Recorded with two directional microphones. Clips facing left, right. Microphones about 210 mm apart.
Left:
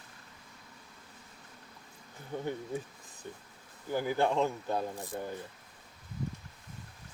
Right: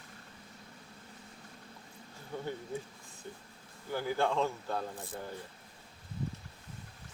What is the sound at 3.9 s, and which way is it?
Speech, 15° left (ahead or behind).